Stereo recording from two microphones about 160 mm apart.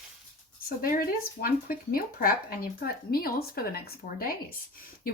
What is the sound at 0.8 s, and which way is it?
Speech, 65° left (ahead or behind).